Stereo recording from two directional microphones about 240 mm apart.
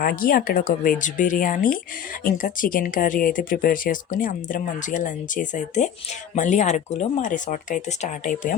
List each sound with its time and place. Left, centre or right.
0.0 s speech: left